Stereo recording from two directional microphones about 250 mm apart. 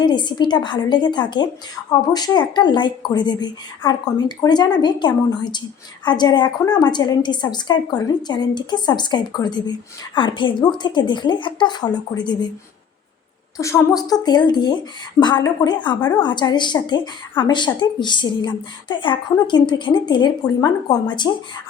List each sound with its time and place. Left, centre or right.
0.0 s a woman's voice: centre
13.6 s a woman's voice: centre